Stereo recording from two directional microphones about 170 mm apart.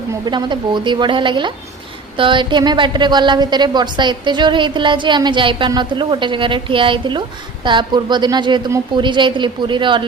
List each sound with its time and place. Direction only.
0.1 s a woman's voice: 25° right (ahead or behind)